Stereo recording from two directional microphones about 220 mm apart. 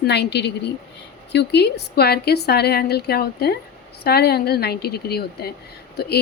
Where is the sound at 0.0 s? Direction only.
50° left (ahead or behind).